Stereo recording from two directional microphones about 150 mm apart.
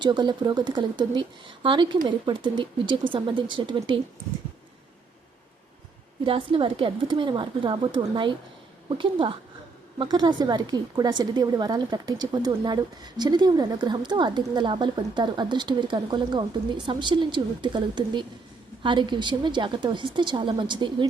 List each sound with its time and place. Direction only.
0.0 s a woman's voice: 30° right (ahead or behind)
6.2 s a woman's voice: 35° right (ahead or behind)